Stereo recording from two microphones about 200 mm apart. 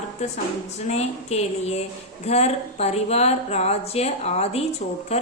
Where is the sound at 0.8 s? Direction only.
35° left (ahead or behind).